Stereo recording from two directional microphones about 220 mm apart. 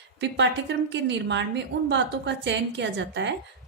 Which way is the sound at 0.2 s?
55° right (ahead or behind).